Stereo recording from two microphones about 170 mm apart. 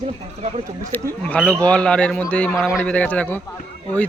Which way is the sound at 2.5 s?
5° right (ahead or behind).